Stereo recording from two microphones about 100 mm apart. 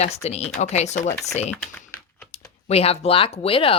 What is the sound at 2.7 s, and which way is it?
Speech, 90° left.